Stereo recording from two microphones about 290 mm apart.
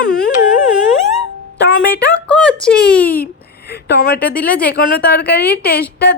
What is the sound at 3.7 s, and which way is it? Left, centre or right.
A woman's voice, left.